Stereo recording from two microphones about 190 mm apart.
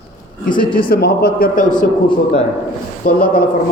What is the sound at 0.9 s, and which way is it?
Speech, 55° left (ahead or behind).